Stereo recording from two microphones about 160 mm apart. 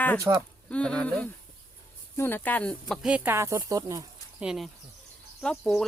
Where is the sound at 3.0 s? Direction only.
5° right (ahead or behind).